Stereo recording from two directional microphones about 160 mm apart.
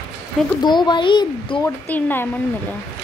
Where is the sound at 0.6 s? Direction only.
30° left (ahead or behind).